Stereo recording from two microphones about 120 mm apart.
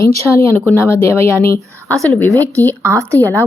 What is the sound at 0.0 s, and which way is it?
A woman's voice, 25° left (ahead or behind).